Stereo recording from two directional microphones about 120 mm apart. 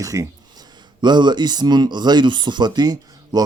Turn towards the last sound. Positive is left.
turn(degrees=-35)  # may be behind; listen again after turning